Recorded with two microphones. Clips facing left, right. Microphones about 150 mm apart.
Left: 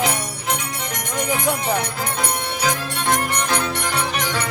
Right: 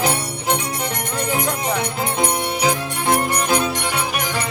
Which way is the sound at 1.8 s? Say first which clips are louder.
Right 3 dB; 25° right (ahead or behind).